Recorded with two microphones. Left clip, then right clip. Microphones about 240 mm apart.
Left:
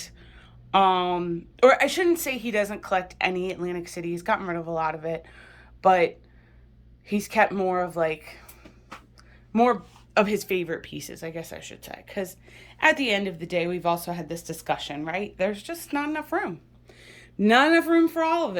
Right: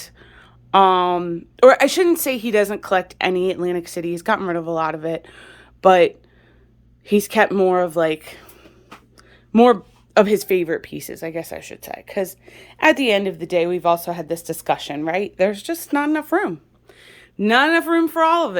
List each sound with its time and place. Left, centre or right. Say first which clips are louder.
0.0 s speech: right 3 dB; centre
9.5 s speech: right 8 dB; right
10.2 s speech: right 8 dB; right
17.0 s speech: right 3 dB; centre